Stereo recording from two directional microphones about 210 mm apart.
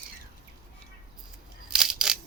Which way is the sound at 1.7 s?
5° right (ahead or behind).